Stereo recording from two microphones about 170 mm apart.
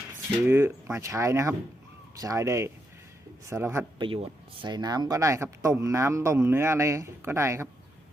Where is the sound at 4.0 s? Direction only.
30° right (ahead or behind); by 7.7 s 15° right (ahead or behind).